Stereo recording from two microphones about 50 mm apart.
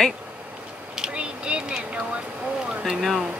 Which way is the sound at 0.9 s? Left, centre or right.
Centre.